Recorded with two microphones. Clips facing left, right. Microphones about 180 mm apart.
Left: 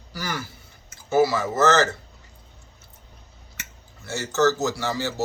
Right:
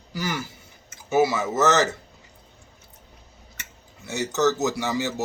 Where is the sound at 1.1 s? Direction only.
20° right (ahead or behind).